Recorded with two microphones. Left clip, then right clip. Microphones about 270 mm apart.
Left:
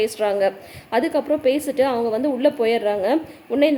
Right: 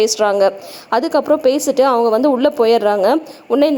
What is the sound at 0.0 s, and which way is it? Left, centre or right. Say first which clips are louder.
A woman's voice: right 6 dB; right.